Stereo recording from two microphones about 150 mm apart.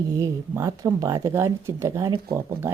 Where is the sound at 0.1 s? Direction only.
20° right (ahead or behind).